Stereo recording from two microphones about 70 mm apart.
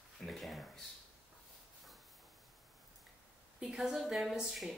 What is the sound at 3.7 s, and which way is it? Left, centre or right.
Speech, centre.